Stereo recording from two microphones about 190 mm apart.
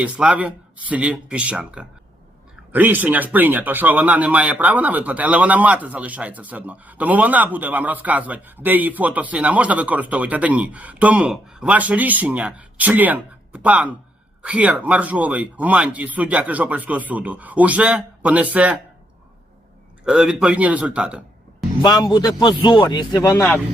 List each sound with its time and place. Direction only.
0.0 s speech: 5° right (ahead or behind)
20.1 s a man's voice: 5° right (ahead or behind)
21.8 s a man's voice: 20° left (ahead or behind)